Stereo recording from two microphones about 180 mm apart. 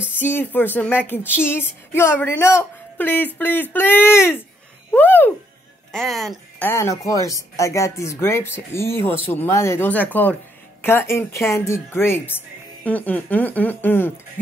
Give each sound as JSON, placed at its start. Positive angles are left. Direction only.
{"t": 0.2, "sound": "speech", "side_deg": 10}
{"t": 6.7, "sound": "speech", "side_deg": 15}